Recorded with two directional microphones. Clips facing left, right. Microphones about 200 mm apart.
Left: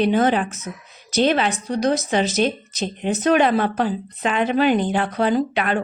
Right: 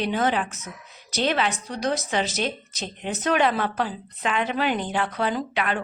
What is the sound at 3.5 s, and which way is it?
Speech, 50° left (ahead or behind).